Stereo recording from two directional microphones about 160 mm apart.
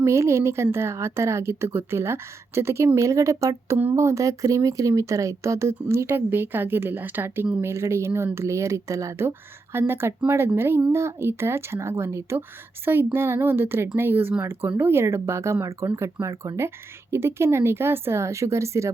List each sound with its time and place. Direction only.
0.0 s a woman's voice: 15° right (ahead or behind)